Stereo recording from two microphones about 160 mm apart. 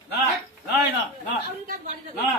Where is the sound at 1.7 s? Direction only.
55° right (ahead or behind).